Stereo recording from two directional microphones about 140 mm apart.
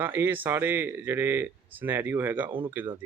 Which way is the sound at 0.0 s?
15° right (ahead or behind).